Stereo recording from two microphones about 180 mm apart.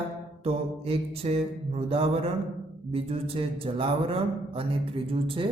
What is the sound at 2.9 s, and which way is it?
A man's voice, 30° right (ahead or behind).